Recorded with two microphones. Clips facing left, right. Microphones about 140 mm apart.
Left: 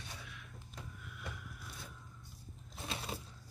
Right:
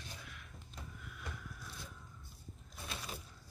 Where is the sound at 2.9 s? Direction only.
25° left (ahead or behind).